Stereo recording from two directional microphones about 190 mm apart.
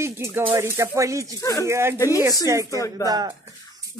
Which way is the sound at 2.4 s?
15° right (ahead or behind).